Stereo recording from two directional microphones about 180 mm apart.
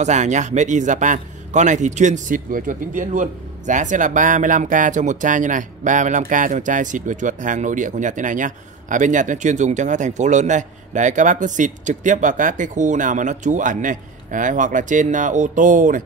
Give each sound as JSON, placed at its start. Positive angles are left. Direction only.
{"t": 0.0, "sound": "a man's voice", "side_deg": -40}